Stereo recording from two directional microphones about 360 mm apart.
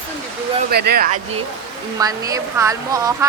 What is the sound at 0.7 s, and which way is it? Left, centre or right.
Speech, right.